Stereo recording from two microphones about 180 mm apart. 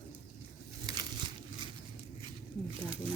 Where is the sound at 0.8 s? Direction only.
20° right (ahead or behind).